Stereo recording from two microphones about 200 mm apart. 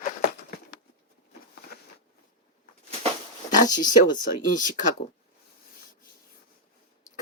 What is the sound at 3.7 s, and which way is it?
Speech, 40° left (ahead or behind).